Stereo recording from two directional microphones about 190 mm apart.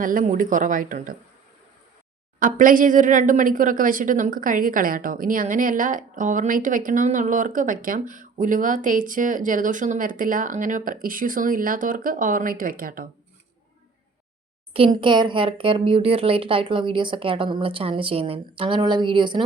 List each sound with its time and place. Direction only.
0.0 s speech: 45° right (ahead or behind)
2.4 s speech: 45° right (ahead or behind)
15.0 s a woman's voice: 25° right (ahead or behind)